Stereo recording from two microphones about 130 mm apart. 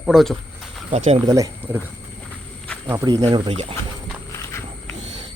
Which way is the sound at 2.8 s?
30° right (ahead or behind).